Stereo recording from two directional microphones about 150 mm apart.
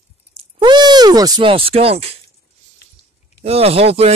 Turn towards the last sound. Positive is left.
turn(degrees=-40)  # may be behind; listen again after turning